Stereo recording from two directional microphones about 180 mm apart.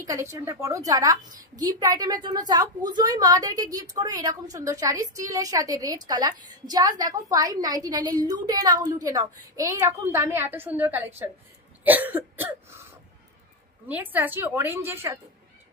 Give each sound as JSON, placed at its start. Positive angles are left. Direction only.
{"t": 0.0, "sound": "a woman's voice", "side_deg": -15}
{"t": 11.8, "sound": "cough", "side_deg": -10}
{"t": 13.8, "sound": "a woman's voice", "side_deg": -10}